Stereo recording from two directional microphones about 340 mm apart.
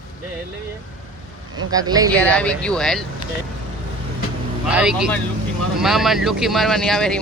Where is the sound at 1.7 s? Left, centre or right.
Centre.